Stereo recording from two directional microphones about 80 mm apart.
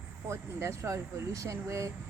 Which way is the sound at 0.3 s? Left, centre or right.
Right.